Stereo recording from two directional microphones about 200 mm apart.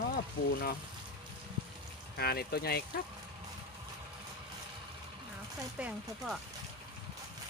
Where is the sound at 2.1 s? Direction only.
50° left (ahead or behind).